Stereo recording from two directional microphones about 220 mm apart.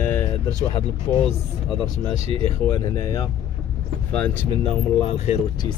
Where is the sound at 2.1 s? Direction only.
25° right (ahead or behind).